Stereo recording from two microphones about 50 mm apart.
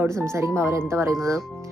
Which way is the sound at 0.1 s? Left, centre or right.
Right.